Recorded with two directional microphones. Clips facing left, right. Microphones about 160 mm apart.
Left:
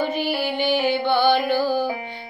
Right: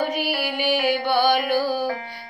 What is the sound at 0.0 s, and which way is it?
Music, 10° right (ahead or behind).